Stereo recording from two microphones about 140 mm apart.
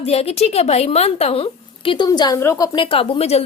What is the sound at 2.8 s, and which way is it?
Speech, 40° left (ahead or behind).